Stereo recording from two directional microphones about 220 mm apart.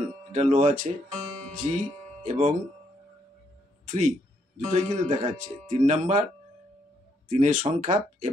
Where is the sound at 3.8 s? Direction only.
35° right (ahead or behind).